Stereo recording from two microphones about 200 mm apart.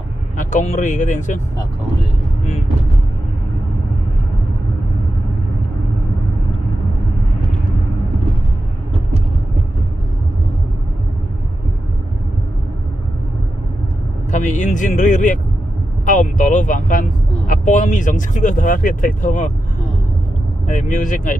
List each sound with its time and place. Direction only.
0.4 s speech: 40° left (ahead or behind)
14.3 s speech: 40° left (ahead or behind)
20.6 s speech: 40° left (ahead or behind)